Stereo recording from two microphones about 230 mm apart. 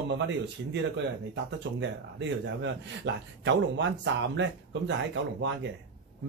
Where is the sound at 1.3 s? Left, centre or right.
Right.